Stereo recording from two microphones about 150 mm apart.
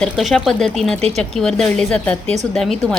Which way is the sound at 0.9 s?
45° right (ahead or behind).